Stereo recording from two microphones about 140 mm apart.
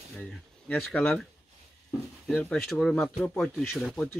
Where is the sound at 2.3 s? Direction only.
10° left (ahead or behind).